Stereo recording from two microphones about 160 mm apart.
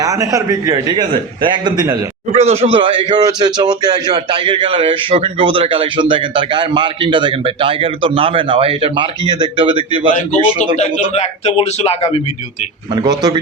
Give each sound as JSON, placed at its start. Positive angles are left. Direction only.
{"t": 0.0, "sound": "a man's voice", "side_deg": -20}
{"t": 2.3, "sound": "speech", "side_deg": -40}
{"t": 10.2, "sound": "a man's voice", "side_deg": 45}
{"t": 12.9, "sound": "a man's voice", "side_deg": -25}